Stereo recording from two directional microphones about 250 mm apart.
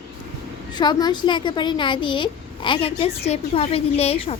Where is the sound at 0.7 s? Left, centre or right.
Centre.